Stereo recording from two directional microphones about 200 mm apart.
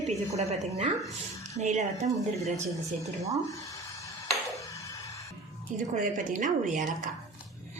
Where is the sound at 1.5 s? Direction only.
35° right (ahead or behind).